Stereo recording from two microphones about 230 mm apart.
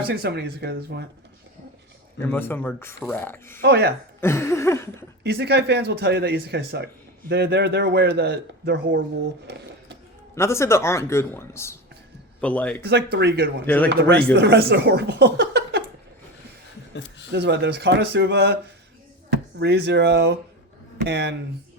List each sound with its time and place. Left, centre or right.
0.1 s speech: right
2.1 s speech: centre
3.6 s speech: right
4.2 s speech: centre
5.2 s speech: right
10.3 s a man's voice: centre
12.8 s speech: right
13.7 s speech: centre
13.9 s speech: right
16.9 s chuckle: left
17.3 s speech: right
19.5 s speech: right